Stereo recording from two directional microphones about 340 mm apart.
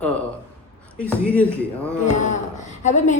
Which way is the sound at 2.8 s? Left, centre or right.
Left.